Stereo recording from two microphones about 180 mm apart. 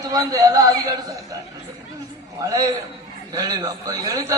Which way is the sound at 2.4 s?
20° right (ahead or behind).